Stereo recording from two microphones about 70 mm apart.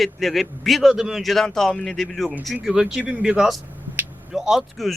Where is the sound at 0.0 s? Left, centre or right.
Centre.